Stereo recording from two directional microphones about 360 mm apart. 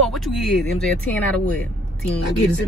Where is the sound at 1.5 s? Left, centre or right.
Centre.